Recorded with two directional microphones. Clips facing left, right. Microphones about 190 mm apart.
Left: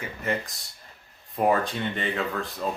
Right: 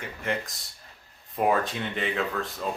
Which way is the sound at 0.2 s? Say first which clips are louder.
Left 1 dB; centre (ahead or behind).